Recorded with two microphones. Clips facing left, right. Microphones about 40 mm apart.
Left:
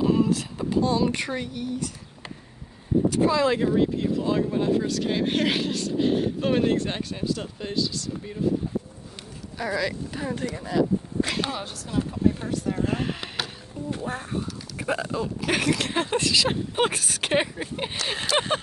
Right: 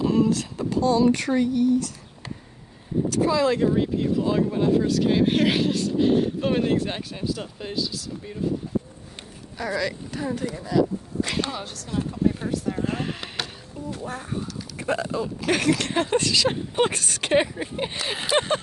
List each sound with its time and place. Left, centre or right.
0.0 s speech: centre
0.7 s speech: left
1.0 s a sound: centre
3.2 s speech: left
3.7 s speech: centre
9.6 s a sound: centre
10.5 s speech: left
11.2 s speech: centre
13.8 s speech: left
14.8 s speech: centre